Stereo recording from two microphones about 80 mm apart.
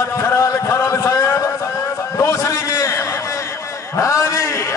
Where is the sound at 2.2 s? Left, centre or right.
Left.